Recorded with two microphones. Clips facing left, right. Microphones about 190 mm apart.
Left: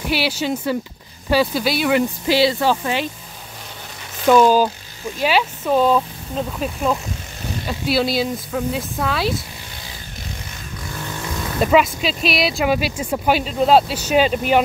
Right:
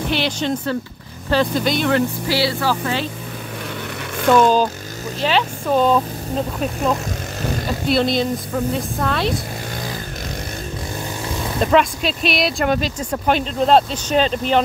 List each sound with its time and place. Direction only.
0.1 s speech: 10° left (ahead or behind)
4.3 s a woman's voice: 10° left (ahead or behind)
7.9 s a woman's voice: 5° left (ahead or behind)
11.6 s speech: 5° left (ahead or behind)